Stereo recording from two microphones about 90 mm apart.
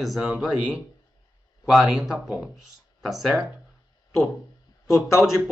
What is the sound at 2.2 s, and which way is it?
Speech, 20° right (ahead or behind).